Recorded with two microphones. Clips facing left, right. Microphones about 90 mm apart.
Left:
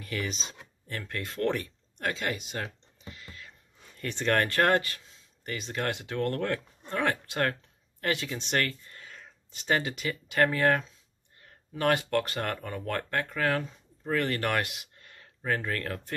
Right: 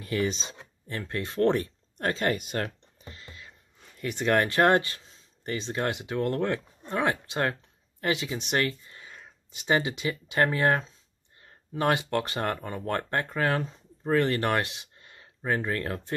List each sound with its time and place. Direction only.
0.0 s speech: 30° right (ahead or behind); by 3.1 s 50° right (ahead or behind)
3.1 s a sound: 30° right (ahead or behind)
4.0 s speech: 10° right (ahead or behind)